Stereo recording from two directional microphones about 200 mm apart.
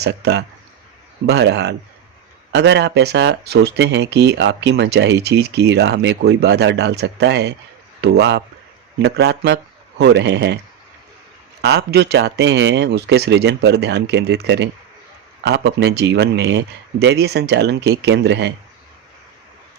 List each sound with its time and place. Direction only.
0.0 s speech: 55° right (ahead or behind)
11.6 s speech: 55° right (ahead or behind)